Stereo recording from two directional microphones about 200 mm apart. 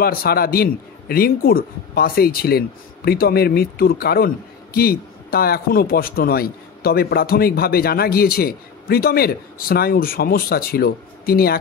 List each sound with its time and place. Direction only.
0.0 s speech: 50° left (ahead or behind)